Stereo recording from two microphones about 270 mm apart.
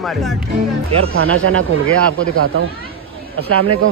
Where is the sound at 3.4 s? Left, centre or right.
Right.